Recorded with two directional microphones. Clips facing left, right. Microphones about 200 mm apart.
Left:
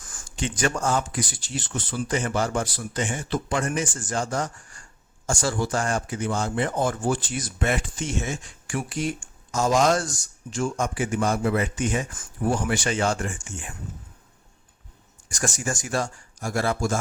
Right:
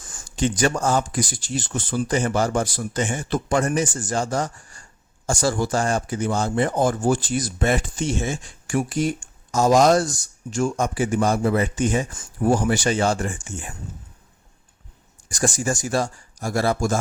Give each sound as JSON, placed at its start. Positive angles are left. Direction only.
{"t": 0.3, "sound": "speech", "side_deg": -40}
{"t": 15.5, "sound": "speech", "side_deg": -35}